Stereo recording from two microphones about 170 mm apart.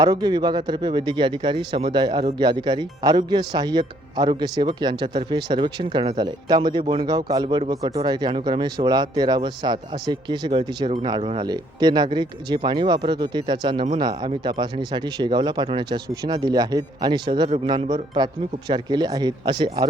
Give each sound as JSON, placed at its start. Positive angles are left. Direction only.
{"t": 0.0, "sound": "speech", "side_deg": -25}